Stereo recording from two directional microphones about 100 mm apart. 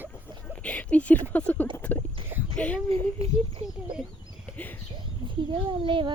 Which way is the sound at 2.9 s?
85° right.